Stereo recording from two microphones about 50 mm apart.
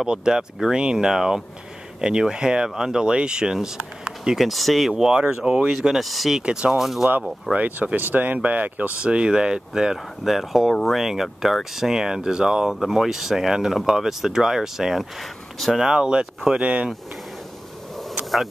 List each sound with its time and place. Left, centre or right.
0.0 s speech: centre
4.4 s speech: centre
6.3 s speech: centre
6.8 s speech: centre
7.5 s speech: right
9.0 s speech: right; by 10.7 s centre
10.7 s speech: centre
11.0 s speech: centre; by 16.9 s right